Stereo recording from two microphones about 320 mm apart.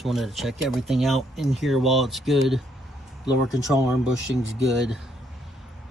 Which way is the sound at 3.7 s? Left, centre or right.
Centre.